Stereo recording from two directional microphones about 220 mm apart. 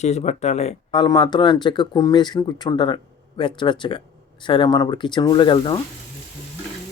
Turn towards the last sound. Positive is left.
turn(degrees=20)  # may be behind; listen again after turning